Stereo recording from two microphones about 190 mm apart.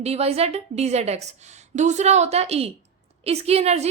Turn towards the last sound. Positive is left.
turn(degrees=-35)  # may be behind; listen again after turning